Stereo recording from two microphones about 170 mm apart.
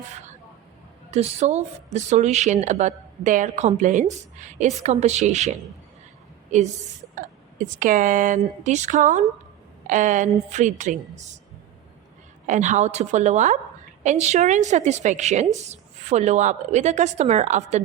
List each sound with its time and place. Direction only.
1.1 s speech: 40° right (ahead or behind)
7.2 s speech: 50° right (ahead or behind)
12.5 s speech: 45° right (ahead or behind)